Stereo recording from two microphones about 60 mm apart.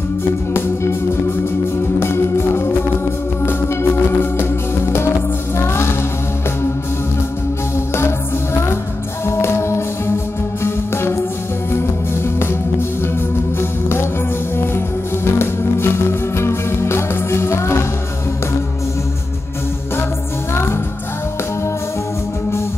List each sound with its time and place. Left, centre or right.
0.5 s music: left
2.0 s music: left
9.2 s music: left
13.6 s music: left
15.3 s music: left